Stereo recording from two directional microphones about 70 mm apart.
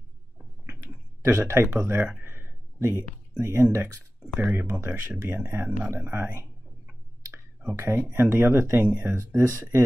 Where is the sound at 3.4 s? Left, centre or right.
Right.